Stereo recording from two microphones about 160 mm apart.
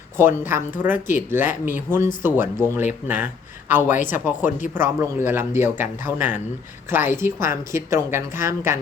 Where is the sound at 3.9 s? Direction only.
55° left (ahead or behind).